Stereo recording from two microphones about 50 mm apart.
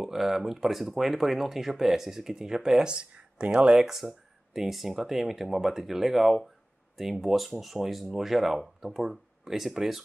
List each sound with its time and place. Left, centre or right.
0.0 s speech: centre
3.8 s speech: centre